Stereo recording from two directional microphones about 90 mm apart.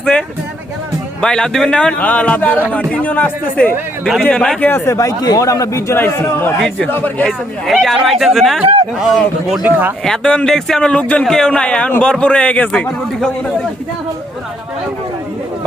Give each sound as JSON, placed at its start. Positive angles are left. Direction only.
{"t": 0.0, "sound": "a man's voice", "side_deg": 10}
{"t": 4.6, "sound": "a man's voice", "side_deg": 25}
{"t": 4.9, "sound": "a man's voice", "side_deg": 45}
{"t": 6.0, "sound": "a man's voice", "side_deg": 25}
{"t": 6.6, "sound": "speech", "side_deg": 5}
{"t": 6.8, "sound": "a man's voice", "side_deg": 20}
{"t": 7.3, "sound": "speech", "side_deg": 0}
{"t": 9.6, "sound": "speech", "side_deg": -20}
{"t": 10.0, "sound": "a man's voice", "side_deg": 5}